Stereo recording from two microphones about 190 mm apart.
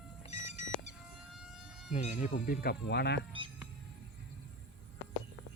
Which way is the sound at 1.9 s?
40° left (ahead or behind).